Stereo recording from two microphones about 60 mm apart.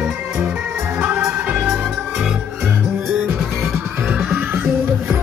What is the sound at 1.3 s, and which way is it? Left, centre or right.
Music, right.